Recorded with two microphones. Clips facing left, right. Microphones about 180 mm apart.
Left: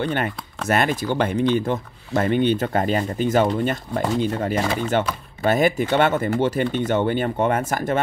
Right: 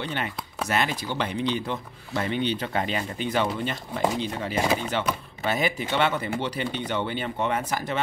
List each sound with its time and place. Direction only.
0.0 s speech: 50° left (ahead or behind)